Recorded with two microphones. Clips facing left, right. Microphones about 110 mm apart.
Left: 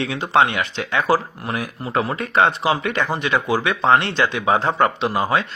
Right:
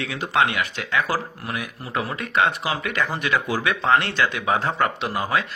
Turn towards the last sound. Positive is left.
turn(degrees=25)  # may be behind; listen again after turning